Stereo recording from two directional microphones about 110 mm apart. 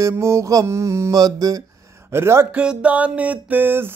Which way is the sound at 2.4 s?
10° right (ahead or behind).